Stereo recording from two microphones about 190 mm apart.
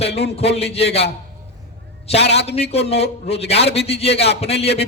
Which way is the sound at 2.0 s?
35° left (ahead or behind).